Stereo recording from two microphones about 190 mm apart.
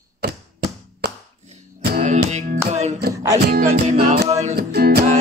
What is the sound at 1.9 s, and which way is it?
Music, 40° right (ahead or behind).